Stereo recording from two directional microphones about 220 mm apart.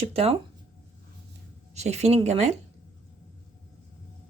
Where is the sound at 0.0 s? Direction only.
25° right (ahead or behind).